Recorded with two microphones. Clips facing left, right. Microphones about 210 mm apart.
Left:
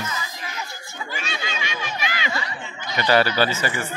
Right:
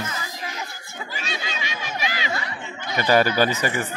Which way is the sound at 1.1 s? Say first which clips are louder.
Left 1 dB; 35° right (ahead or behind).